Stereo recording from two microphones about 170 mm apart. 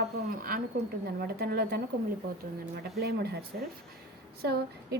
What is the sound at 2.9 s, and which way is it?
Speech, 70° right (ahead or behind).